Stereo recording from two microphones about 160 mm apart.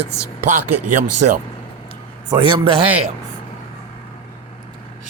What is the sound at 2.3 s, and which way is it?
Speech, 30° right (ahead or behind).